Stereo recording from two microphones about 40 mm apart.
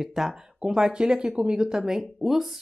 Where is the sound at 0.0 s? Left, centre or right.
Centre.